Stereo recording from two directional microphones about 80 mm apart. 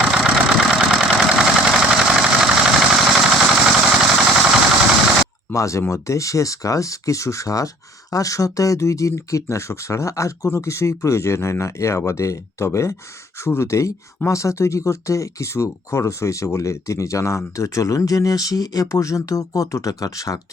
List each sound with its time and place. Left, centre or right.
0.0 s engine: centre
5.5 s speech: left